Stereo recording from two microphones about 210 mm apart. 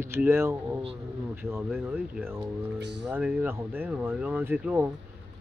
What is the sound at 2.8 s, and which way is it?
Speech, 55° right (ahead or behind).